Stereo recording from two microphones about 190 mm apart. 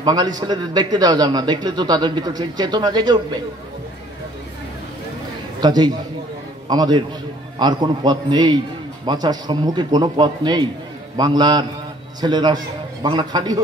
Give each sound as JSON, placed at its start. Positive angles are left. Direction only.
{"t": 0.0, "sound": "a man's voice", "side_deg": -20}
{"t": 5.6, "sound": "a man's voice", "side_deg": -20}